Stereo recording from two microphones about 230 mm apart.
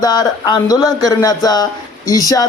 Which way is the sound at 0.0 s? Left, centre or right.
Centre.